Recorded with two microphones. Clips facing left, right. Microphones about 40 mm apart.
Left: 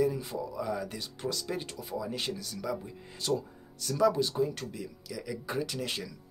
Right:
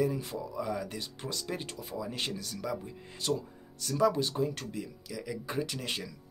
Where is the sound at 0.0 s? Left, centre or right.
Right.